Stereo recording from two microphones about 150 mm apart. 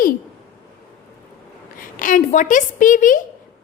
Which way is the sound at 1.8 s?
65° left (ahead or behind).